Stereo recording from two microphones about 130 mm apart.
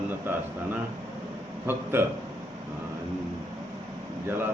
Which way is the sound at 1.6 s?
15° right (ahead or behind).